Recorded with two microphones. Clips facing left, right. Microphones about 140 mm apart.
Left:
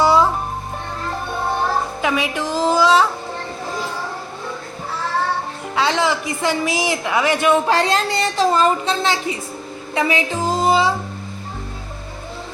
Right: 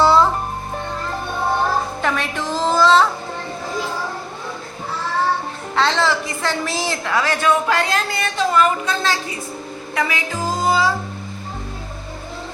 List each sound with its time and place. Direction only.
0.0 s music: 15° left (ahead or behind)
2.0 s music: 10° left (ahead or behind)
5.7 s a woman's voice: 10° left (ahead or behind)